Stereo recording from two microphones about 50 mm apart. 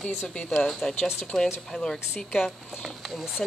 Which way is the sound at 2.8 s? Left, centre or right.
Centre.